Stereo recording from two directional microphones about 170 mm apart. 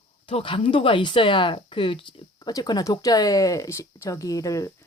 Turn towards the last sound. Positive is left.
turn(degrees=20)  # may be behind; listen again after turning